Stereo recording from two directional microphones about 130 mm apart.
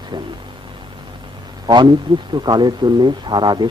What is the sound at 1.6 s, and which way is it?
A man's voice, 35° right (ahead or behind).